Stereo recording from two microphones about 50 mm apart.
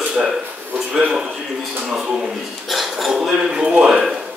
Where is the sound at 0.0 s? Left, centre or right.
Right.